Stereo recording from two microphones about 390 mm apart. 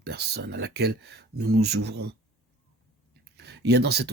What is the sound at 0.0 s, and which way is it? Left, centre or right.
Speech, right.